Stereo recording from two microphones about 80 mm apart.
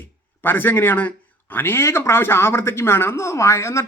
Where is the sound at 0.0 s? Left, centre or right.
Left.